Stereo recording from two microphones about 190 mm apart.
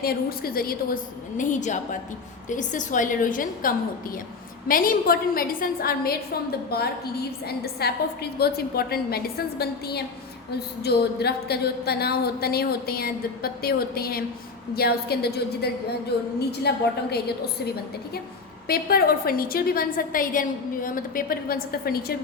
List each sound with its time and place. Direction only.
0.0 s a woman's voice: 50° left (ahead or behind)
1.4 s a woman's voice: 40° left (ahead or behind)